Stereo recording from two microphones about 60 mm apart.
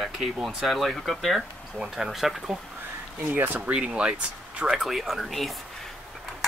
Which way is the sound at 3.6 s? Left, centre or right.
Centre.